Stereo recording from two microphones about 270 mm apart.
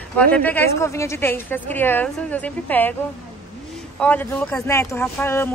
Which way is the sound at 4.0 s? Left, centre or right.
Centre.